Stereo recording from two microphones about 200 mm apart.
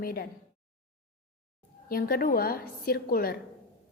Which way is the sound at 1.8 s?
45° left (ahead or behind).